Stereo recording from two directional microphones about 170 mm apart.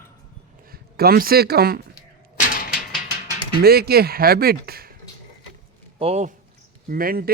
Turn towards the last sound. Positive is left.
turn(degrees=-60)  # may be behind; listen again after turning